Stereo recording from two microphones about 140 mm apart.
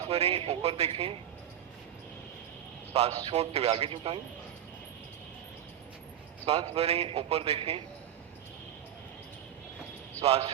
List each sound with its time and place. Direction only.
0.1 s a man's voice: 45° right (ahead or behind)
2.9 s a man's voice: 45° right (ahead or behind)
6.4 s a man's voice: 45° right (ahead or behind)
10.2 s a man's voice: 45° right (ahead or behind)